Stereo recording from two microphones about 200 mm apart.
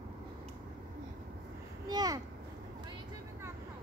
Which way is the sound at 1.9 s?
20° right (ahead or behind).